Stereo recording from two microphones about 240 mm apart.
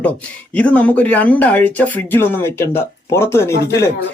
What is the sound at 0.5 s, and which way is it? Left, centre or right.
Speech, centre.